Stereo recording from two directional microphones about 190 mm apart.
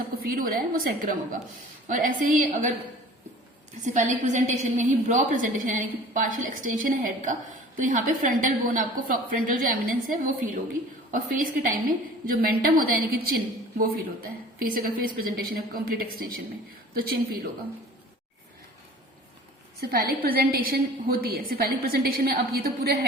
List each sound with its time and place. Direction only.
0.2 s a woman's voice: 50° right (ahead or behind)
3.8 s a woman's voice: 40° right (ahead or behind)
19.9 s a woman's voice: 55° right (ahead or behind)